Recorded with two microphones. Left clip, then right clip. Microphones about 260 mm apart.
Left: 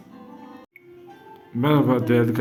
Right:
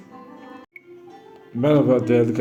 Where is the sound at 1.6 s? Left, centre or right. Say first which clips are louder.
Right 3 dB; centre.